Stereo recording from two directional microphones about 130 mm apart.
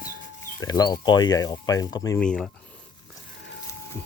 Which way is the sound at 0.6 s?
30° left (ahead or behind).